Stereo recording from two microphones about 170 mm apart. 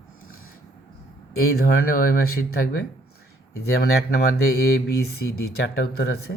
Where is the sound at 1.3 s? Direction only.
65° left (ahead or behind).